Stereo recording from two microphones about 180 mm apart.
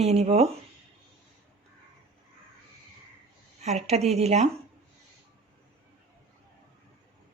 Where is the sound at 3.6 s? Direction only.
35° right (ahead or behind).